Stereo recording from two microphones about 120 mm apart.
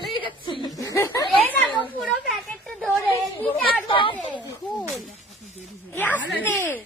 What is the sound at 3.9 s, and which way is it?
Speech, 45° left (ahead or behind).